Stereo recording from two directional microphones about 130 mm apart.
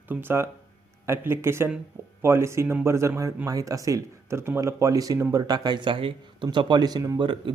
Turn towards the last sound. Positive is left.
turn(degrees=-40)  # may be behind; listen again after turning